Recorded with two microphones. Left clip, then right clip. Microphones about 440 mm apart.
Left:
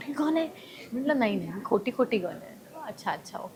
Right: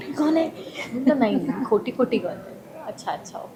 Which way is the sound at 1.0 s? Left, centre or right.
Left.